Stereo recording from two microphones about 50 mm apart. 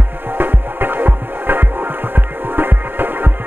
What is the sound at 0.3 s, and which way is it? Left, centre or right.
Music, right.